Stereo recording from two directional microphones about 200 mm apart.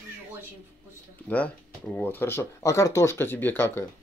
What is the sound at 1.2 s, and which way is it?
Speech, 5° left (ahead or behind).